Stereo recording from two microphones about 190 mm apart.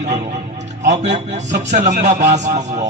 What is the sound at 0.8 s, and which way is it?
A man's voice, 40° right (ahead or behind).